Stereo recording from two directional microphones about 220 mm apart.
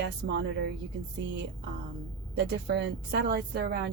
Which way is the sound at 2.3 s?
50° right (ahead or behind).